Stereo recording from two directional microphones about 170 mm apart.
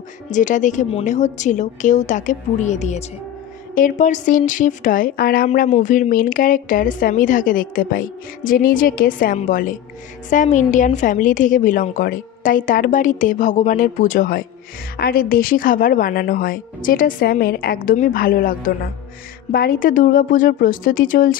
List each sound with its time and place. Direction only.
0.3 s speech: 50° left (ahead or behind)
5.5 s speech: 45° left (ahead or behind)